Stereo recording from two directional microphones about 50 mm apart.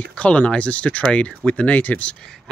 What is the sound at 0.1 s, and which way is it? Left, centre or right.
Speech, left.